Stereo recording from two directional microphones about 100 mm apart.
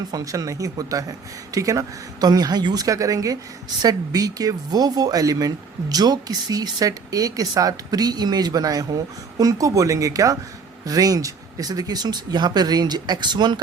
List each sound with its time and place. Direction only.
0.1 s speech: 35° right (ahead or behind)